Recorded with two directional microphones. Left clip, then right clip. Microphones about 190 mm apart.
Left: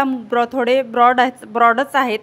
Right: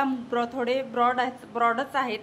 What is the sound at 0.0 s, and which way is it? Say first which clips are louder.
A woman's voice: left 9 dB; 40° left (ahead or behind).